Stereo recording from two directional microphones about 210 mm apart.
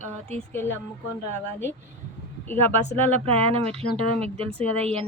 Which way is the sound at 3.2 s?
30° right (ahead or behind).